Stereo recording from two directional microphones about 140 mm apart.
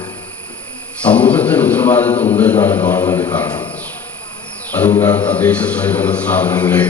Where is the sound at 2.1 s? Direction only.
50° left (ahead or behind).